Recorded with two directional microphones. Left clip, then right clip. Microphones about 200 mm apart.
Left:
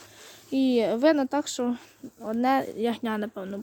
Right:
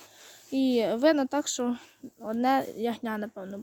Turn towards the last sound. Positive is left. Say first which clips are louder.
# left 3 dB
turn(degrees=5)  # may be behind; listen again after turning